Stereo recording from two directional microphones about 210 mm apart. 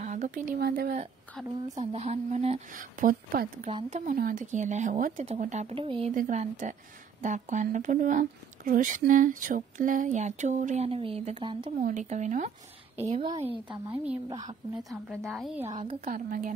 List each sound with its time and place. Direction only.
0.0 s speech: 35° right (ahead or behind)
1.8 s speech: 30° right (ahead or behind)
13.8 s a woman's voice: 15° right (ahead or behind)
14.8 s speech: centre (ahead or behind)
15.8 s speech: 35° right (ahead or behind)